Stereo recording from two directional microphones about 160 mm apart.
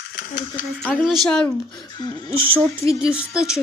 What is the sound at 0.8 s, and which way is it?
Speech, centre (ahead or behind).